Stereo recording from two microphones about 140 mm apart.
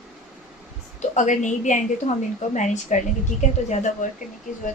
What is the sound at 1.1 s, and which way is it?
Speech, 60° left (ahead or behind).